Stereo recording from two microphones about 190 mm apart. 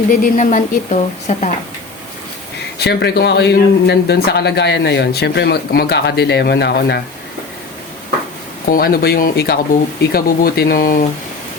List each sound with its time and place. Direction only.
0.1 s speech: 45° left (ahead or behind)
2.7 s speech: 60° left (ahead or behind)
8.6 s speech: 50° left (ahead or behind)